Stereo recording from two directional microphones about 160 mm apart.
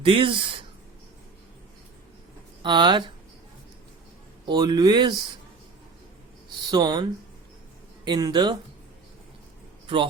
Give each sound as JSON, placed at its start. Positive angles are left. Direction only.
{"t": 0.0, "sound": "speech", "side_deg": -35}
{"t": 2.6, "sound": "speech", "side_deg": -30}
{"t": 4.4, "sound": "speech", "side_deg": -25}
{"t": 6.7, "sound": "speech", "side_deg": -25}
{"t": 8.0, "sound": "speech", "side_deg": -25}
{"t": 9.8, "sound": "a man's voice", "side_deg": -30}